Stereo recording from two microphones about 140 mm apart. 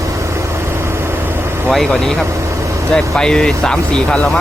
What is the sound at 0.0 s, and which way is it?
Vehicle, 20° right (ahead or behind).